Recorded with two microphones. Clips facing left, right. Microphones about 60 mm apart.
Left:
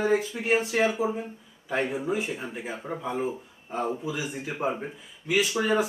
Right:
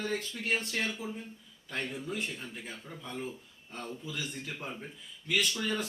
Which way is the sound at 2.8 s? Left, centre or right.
Left.